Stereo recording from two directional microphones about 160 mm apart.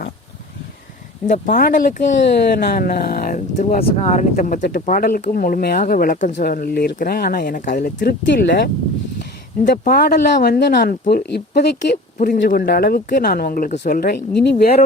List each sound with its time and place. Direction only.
1.3 s speech: 55° left (ahead or behind)
2.5 s speech: 80° left; by 6.3 s 60° left (ahead or behind)
6.3 s speech: 70° left (ahead or behind); by 8.7 s 90° left
9.6 s speech: 60° left (ahead or behind); by 10.7 s 85° left
10.8 s speech: 60° left (ahead or behind); by 11.9 s 90° left
12.2 s speech: 55° left (ahead or behind); by 14.4 s 75° left (ahead or behind)